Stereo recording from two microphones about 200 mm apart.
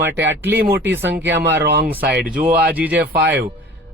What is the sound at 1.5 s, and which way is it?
Speech, 60° right (ahead or behind).